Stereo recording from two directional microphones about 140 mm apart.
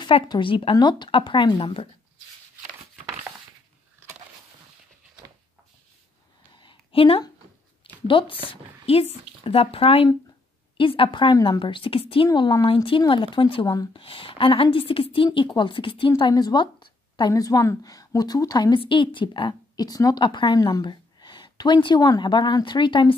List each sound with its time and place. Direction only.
0.0 s a woman's voice: 35° left (ahead or behind)
6.5 s a sound: 35° left (ahead or behind)
8.1 s a woman's voice: 40° left (ahead or behind)
12.3 s a woman's voice: 30° left (ahead or behind)